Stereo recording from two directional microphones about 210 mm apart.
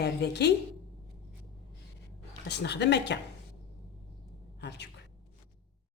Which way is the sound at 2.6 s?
55° left (ahead or behind).